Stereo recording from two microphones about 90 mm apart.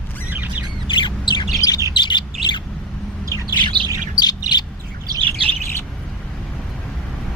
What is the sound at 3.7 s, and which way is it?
Bird, 60° right (ahead or behind).